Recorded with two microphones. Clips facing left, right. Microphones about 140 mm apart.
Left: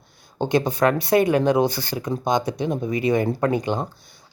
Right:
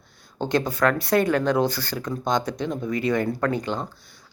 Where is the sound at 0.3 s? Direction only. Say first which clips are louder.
Left 3 dB; 15° left (ahead or behind).